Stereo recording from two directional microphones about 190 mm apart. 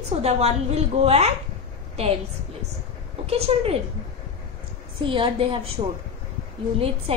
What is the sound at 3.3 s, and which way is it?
Speech, 30° right (ahead or behind).